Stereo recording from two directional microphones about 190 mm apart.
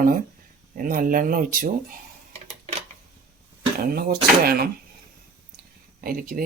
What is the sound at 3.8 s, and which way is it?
Speech, 50° right (ahead or behind).